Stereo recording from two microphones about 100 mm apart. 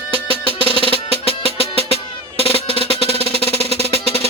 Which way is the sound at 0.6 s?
65° left (ahead or behind).